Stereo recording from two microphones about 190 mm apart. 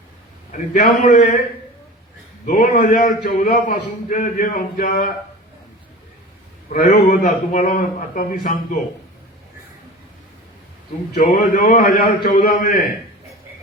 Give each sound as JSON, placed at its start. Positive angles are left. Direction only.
{"t": 0.7, "sound": "a man's voice", "side_deg": 50}
{"t": 2.5, "sound": "a man's voice", "side_deg": 40}
{"t": 6.7, "sound": "a man's voice", "side_deg": 45}
{"t": 11.1, "sound": "a man's voice", "side_deg": 45}